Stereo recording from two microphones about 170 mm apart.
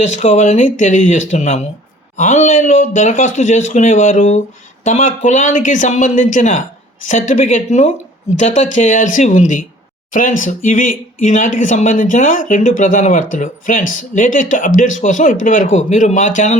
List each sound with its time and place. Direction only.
0.0 s speech: 45° left (ahead or behind)